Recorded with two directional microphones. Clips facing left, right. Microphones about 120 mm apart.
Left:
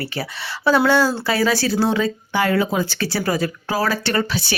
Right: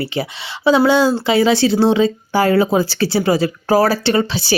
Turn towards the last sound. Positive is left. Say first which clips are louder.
# right 5 dB
turn(degrees=-30)  # may be behind; listen again after turning